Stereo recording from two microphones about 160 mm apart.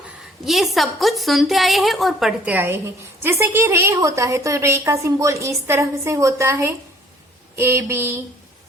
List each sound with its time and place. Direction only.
0.4 s a woman's voice: centre (ahead or behind)